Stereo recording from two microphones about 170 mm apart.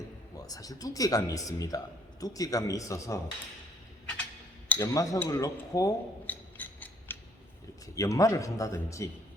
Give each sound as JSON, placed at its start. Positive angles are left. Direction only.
{"t": 0.3, "sound": "speech", "side_deg": 20}
{"t": 4.7, "sound": "speech", "side_deg": 20}